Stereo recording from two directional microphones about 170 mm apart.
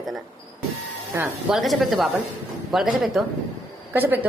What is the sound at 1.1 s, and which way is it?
Speech, 15° right (ahead or behind).